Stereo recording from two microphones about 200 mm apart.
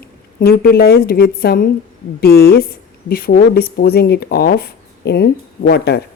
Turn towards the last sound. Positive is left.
turn(degrees=55)  # may be behind; listen again after turning